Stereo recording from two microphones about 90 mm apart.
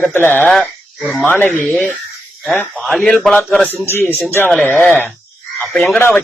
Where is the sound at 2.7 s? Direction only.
5° left (ahead or behind).